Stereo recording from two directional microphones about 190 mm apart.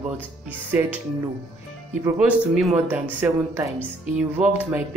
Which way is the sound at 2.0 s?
5° right (ahead or behind).